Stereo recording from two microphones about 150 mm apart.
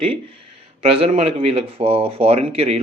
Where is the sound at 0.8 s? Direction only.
40° right (ahead or behind).